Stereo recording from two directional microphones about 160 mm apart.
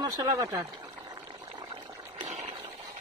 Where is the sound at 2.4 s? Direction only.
30° right (ahead or behind).